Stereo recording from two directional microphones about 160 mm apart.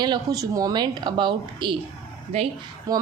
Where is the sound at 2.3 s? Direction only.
40° right (ahead or behind).